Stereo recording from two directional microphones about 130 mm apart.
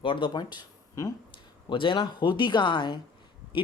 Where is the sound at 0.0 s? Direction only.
40° left (ahead or behind).